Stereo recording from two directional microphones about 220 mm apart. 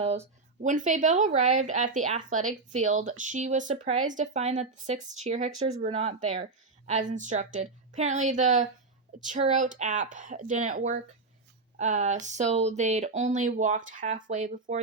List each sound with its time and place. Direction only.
0.0 s speech: 30° right (ahead or behind)